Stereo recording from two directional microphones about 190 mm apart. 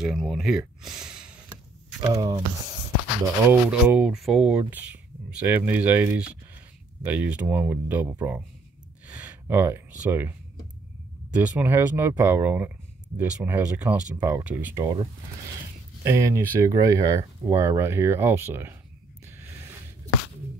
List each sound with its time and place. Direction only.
0.0 s speech: centre (ahead or behind)
2.0 s speech: 20° right (ahead or behind)
3.4 s speech: 10° right (ahead or behind)
11.3 s speech: 10° right (ahead or behind)
16.0 s speech: 15° right (ahead or behind)
19.2 s a sound: 10° right (ahead or behind)